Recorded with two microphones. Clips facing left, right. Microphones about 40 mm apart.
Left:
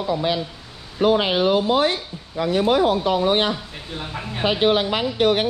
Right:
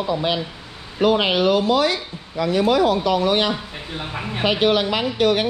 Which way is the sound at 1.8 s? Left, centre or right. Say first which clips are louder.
Even; right.